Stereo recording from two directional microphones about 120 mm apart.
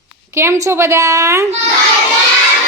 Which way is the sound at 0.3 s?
25° right (ahead or behind).